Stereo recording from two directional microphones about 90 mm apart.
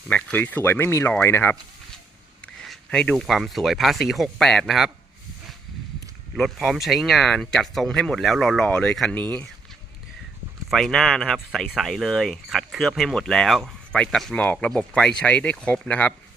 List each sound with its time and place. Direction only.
0.1 s speech: 20° left (ahead or behind)
2.6 s speech: 5° left (ahead or behind)
6.3 s speech: centre (ahead or behind)
10.7 s speech: centre (ahead or behind)